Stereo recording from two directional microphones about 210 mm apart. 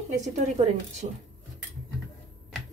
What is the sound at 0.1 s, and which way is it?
A woman's voice, 35° right (ahead or behind).